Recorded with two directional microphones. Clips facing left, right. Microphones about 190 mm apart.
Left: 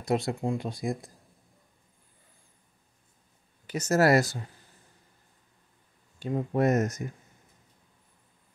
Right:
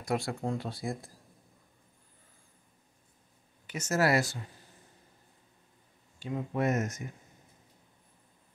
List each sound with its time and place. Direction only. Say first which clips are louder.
0.0 s speech: left 4 dB; 25° left (ahead or behind)
3.6 s speech: left 5 dB; 35° left (ahead or behind)
6.1 s speech: left 5 dB; 40° left (ahead or behind)